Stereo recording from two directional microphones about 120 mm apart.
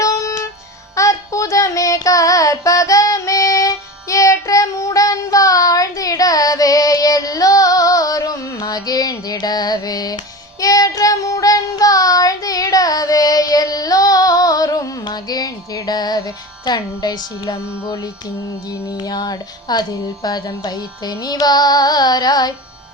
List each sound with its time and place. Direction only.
0.0 s music: 25° left (ahead or behind)
0.9 s child singing: 25° left (ahead or behind)
18.7 s music: 35° left (ahead or behind)